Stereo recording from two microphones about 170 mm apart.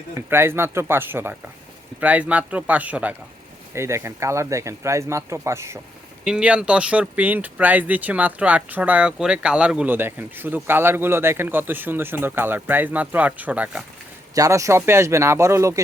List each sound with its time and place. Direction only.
0.3 s speech: 15° right (ahead or behind)
6.2 s speech: 5° right (ahead or behind)